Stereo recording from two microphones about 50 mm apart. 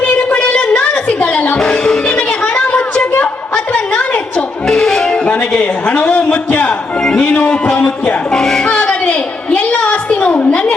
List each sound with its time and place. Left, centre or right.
0.3 s a sound: left
1.5 s music: centre
2.5 s a sound: left
4.6 s music: centre
5.1 s music: left
5.5 s a man's voice: left
8.3 s speech: centre
8.6 s music: left
9.5 s a sound: left